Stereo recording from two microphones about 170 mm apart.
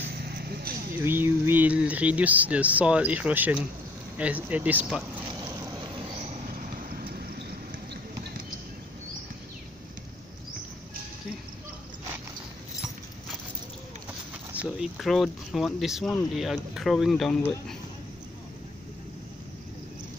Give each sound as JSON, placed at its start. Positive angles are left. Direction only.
{"t": 0.0, "sound": "vehicle", "side_deg": -70}
{"t": 1.0, "sound": "speech", "side_deg": -15}
{"t": 5.6, "sound": "vehicle", "side_deg": -20}
{"t": 6.3, "sound": "a sound", "side_deg": -55}
{"t": 14.5, "sound": "speech", "side_deg": -5}